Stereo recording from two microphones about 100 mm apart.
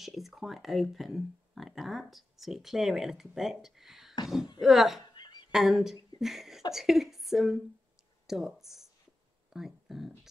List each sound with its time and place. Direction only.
0.0 s speech: centre (ahead or behind)
5.1 s a sound: 45° left (ahead or behind)
5.5 s a woman's voice: 5° right (ahead or behind)